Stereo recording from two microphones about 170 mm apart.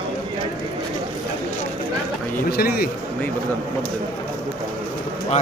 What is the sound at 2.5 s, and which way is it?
Speech, 65° left (ahead or behind).